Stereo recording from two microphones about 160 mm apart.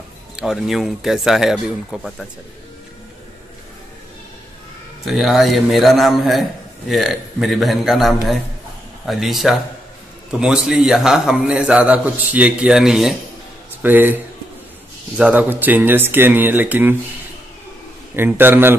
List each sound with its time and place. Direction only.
0.4 s a man's voice: centre (ahead or behind)
5.0 s a man's voice: centre (ahead or behind)
18.1 s speech: 15° right (ahead or behind)